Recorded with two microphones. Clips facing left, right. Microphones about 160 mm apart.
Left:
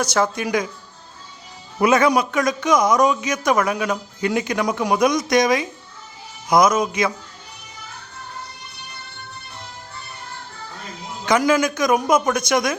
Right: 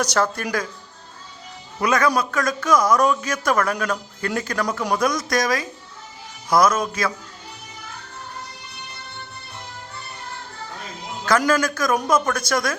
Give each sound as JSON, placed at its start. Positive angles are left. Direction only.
{"t": 0.1, "sound": "a man's voice", "side_deg": 10}
{"t": 1.8, "sound": "a man's voice", "side_deg": 25}
{"t": 11.3, "sound": "a man's voice", "side_deg": 10}